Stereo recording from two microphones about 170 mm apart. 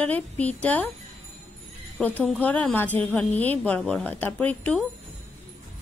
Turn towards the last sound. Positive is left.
turn(degrees=5)  # may be behind; listen again after turning